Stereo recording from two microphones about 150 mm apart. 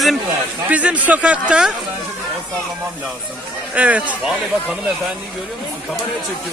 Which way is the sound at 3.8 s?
10° right (ahead or behind).